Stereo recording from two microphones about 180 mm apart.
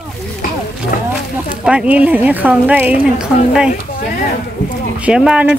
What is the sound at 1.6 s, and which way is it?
Speech, 5° right (ahead or behind).